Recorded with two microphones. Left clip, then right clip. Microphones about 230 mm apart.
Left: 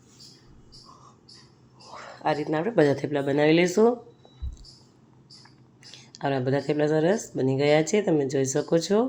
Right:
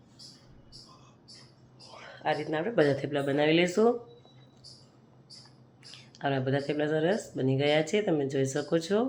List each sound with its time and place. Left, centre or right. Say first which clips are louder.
2.1 s speech: left 4 dB; left
5.8 s speech: left 3 dB; left